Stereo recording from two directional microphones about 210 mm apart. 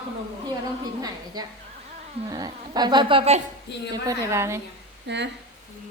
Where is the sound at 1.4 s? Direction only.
20° right (ahead or behind).